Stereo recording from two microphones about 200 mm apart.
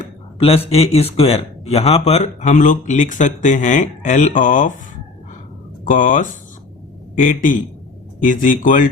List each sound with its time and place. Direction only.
0.3 s speech: 30° left (ahead or behind)
5.8 s speech: 40° left (ahead or behind)